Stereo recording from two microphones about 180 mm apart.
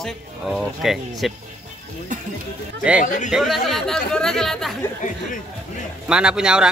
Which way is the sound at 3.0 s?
45° left (ahead or behind).